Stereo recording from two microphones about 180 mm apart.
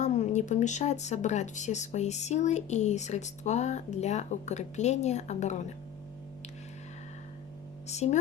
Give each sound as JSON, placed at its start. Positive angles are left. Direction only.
{"t": 0.0, "sound": "speech", "side_deg": 40}
{"t": 7.9, "sound": "speech", "side_deg": 40}